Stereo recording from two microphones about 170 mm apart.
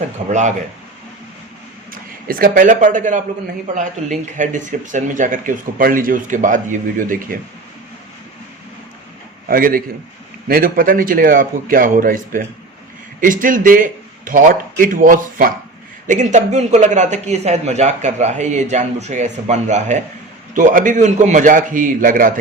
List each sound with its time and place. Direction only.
0.3 s a man's voice: 45° right (ahead or behind)
1.9 s speech: 60° right (ahead or behind)
4.4 s a man's voice: 50° right (ahead or behind)
9.5 s a man's voice: 55° right (ahead or behind)